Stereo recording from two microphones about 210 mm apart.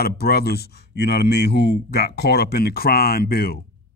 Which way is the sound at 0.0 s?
50° left (ahead or behind).